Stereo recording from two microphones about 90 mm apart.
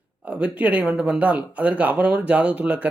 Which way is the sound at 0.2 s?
15° right (ahead or behind).